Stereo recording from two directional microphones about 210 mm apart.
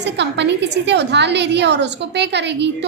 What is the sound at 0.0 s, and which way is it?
A woman's voice, 55° right (ahead or behind).